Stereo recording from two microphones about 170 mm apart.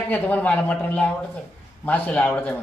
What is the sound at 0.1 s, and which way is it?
Speech, 10° left (ahead or behind).